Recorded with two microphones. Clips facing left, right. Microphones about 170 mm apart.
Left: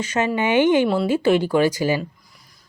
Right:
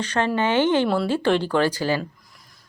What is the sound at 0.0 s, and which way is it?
Speech, 10° left (ahead or behind).